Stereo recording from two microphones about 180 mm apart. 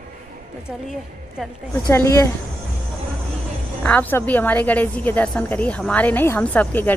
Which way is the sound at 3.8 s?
10° left (ahead or behind).